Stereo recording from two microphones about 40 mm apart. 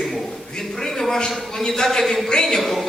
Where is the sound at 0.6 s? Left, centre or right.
Centre.